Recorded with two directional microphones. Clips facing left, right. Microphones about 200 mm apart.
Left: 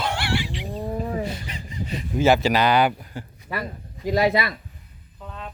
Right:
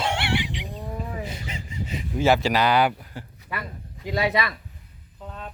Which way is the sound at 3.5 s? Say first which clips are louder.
Left 4 dB; 35° left (ahead or behind).